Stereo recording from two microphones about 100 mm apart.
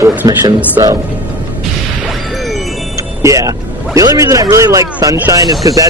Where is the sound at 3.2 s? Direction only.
30° right (ahead or behind).